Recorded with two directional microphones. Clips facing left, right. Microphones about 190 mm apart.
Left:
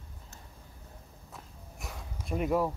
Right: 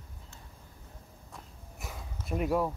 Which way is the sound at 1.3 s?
Centre (ahead or behind).